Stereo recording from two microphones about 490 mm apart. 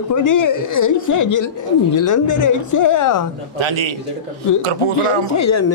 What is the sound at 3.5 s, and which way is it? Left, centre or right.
Speech, right.